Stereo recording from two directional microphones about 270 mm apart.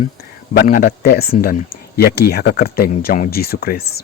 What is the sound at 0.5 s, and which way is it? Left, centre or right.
Speech, left.